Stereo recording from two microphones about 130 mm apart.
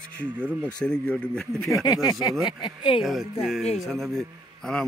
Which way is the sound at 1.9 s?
30° left (ahead or behind).